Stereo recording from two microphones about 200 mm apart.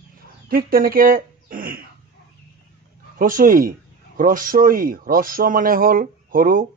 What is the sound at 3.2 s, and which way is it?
Speech, 45° right (ahead or behind).